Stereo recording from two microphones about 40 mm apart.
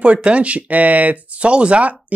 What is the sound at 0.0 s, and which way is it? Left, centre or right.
Speech, right.